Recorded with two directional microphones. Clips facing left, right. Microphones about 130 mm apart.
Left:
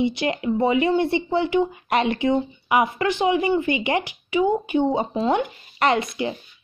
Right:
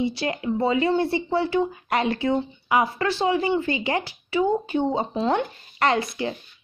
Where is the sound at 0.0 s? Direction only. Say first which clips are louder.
Left 3 dB; 20° left (ahead or behind).